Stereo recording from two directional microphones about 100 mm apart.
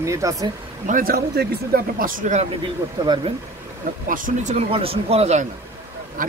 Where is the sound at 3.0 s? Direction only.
40° right (ahead or behind).